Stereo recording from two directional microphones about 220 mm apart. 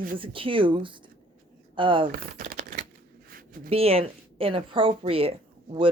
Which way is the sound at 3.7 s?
25° right (ahead or behind).